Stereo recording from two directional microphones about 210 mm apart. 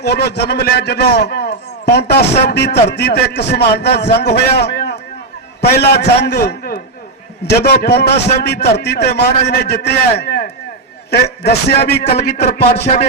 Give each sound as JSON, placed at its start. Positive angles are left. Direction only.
{"t": 0.0, "sound": "a man's voice", "side_deg": 50}
{"t": 12.1, "sound": "a man's voice", "side_deg": 30}